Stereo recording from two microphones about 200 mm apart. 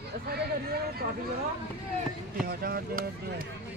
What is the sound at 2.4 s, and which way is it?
Speech, 50° right (ahead or behind).